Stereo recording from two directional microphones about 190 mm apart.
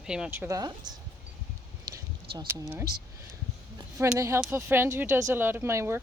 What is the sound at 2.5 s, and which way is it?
Speech, 10° right (ahead or behind).